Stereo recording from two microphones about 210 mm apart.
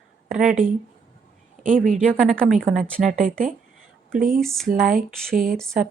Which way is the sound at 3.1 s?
40° right (ahead or behind).